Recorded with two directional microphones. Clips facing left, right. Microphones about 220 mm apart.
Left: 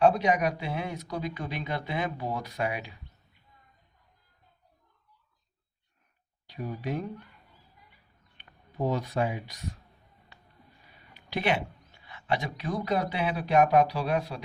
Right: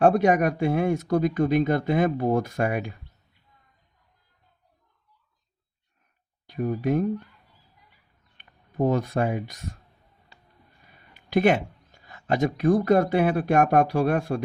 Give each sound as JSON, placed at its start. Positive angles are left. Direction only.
{"t": 0.0, "sound": "speech", "side_deg": -50}
{"t": 6.5, "sound": "speech", "side_deg": -50}
{"t": 8.4, "sound": "speech", "side_deg": -50}
{"t": 11.1, "sound": "speech", "side_deg": -50}